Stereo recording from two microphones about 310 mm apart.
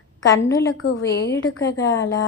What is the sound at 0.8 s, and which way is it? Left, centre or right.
Speech, left.